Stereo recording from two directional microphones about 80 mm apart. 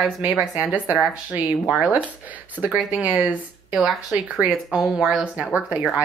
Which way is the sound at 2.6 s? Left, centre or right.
Centre.